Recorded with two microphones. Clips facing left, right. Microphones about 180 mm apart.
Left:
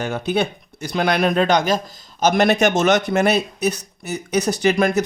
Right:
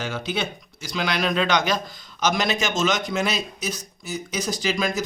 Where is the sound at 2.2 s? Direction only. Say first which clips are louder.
Left 8 dB; 60° left (ahead or behind).